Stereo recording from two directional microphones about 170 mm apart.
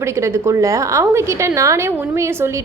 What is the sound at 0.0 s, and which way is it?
A woman's voice, 15° right (ahead or behind).